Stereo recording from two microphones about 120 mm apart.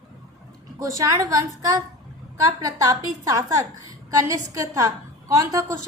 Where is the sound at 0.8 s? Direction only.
25° right (ahead or behind).